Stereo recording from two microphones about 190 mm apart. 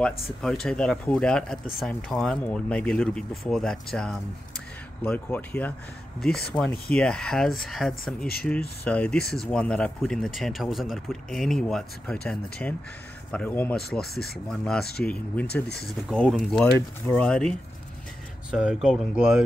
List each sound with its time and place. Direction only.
0.0 s speech: 5° left (ahead or behind)
14.1 s speech: 55° left (ahead or behind)
14.5 s speech: 5° left (ahead or behind)
15.4 s speech: 60° left (ahead or behind)
16.1 s speech: centre (ahead or behind)